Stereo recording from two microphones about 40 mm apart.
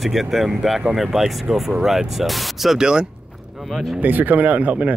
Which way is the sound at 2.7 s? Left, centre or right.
Centre.